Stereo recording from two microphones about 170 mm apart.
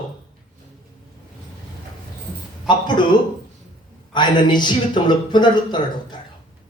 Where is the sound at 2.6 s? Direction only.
25° left (ahead or behind).